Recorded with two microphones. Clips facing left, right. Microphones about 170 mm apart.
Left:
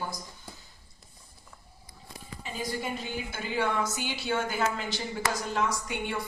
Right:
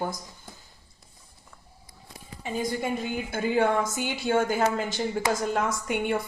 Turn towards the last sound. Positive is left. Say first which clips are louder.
# right 6 dB
turn(degrees=-50)  # may be behind; listen again after turning